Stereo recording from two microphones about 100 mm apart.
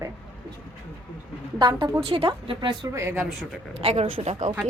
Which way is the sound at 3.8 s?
85° right.